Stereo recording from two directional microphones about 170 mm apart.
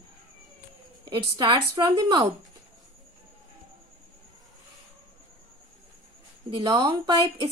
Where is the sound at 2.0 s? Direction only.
25° right (ahead or behind).